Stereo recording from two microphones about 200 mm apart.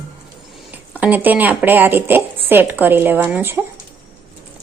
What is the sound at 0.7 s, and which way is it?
Speech, 10° right (ahead or behind).